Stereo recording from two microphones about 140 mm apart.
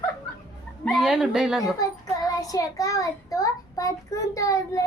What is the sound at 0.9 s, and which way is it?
Speech, centre (ahead or behind).